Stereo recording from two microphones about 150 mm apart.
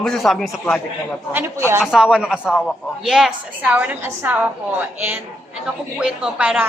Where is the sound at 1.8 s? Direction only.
5° right (ahead or behind).